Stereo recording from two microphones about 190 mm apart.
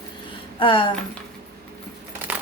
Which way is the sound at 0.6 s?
25° left (ahead or behind).